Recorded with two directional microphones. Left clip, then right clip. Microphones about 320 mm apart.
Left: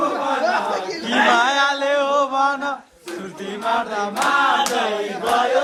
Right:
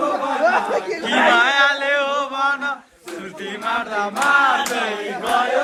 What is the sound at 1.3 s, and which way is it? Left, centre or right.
Chant, centre.